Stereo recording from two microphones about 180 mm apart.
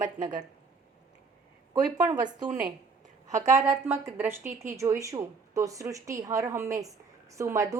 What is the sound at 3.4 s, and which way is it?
A woman's voice, 20° right (ahead or behind).